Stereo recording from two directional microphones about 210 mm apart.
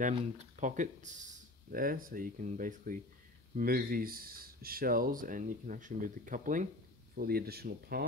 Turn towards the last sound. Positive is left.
turn(degrees=-50)  # may be behind; listen again after turning